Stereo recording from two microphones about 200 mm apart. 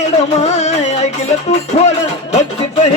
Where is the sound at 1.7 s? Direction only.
35° left (ahead or behind).